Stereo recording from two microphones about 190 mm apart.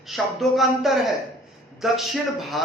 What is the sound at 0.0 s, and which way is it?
A man's voice, centre (ahead or behind).